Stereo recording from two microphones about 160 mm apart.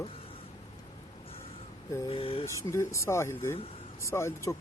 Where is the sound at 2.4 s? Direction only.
20° left (ahead or behind).